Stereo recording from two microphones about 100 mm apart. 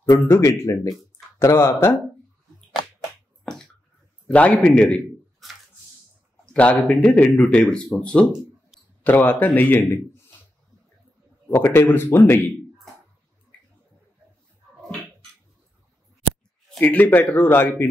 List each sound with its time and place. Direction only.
0.3 s speech: 30° left (ahead or behind)
4.3 s a man's voice: 10° left (ahead or behind)
8.3 s a sound: 5° right (ahead or behind)
9.0 s speech: 20° left (ahead or behind)
11.5 s speech: 20° left (ahead or behind)
16.8 s speech: 15° left (ahead or behind)